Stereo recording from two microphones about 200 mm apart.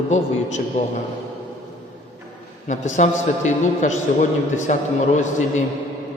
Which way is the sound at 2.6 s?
40° left (ahead or behind).